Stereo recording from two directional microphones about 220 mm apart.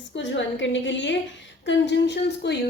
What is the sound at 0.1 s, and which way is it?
A woman's voice, 55° left (ahead or behind).